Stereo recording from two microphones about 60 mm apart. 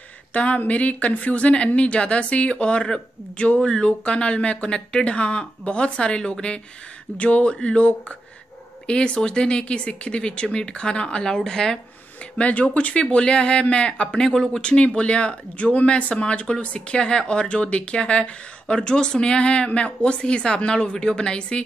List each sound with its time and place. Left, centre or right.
0.3 s speech: left
12.4 s speech: left